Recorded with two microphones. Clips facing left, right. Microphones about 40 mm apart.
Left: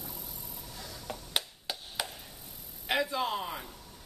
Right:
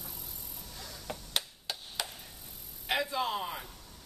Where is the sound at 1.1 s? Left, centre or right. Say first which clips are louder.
Left 1 dB; centre.